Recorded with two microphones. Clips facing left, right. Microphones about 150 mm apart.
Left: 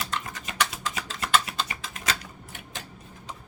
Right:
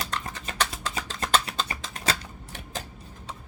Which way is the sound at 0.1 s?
35° right (ahead or behind).